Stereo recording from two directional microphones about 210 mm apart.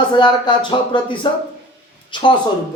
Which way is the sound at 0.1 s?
20° left (ahead or behind).